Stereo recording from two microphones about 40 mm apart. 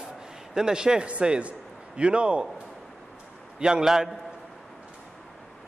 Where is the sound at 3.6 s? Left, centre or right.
Centre.